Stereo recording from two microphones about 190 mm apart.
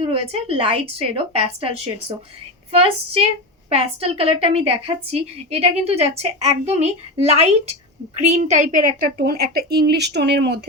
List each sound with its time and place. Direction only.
0.0 s a woman's voice: 30° right (ahead or behind); by 10.6 s 60° right (ahead or behind)